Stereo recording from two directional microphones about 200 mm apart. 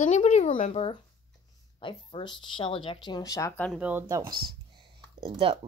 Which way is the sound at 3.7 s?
5° right (ahead or behind).